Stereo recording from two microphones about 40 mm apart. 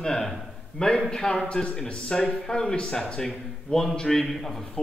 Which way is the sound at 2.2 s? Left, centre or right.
Centre.